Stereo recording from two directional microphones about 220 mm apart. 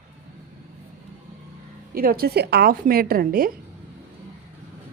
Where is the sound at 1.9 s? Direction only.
40° right (ahead or behind).